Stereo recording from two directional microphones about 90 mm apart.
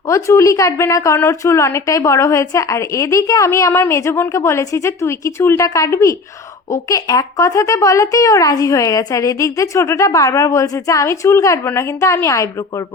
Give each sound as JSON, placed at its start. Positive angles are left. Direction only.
{"t": 0.1, "sound": "speech", "side_deg": 35}